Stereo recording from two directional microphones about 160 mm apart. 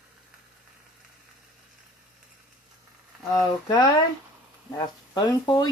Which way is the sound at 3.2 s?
25° left (ahead or behind).